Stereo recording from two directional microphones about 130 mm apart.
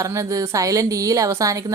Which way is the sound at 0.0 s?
25° right (ahead or behind).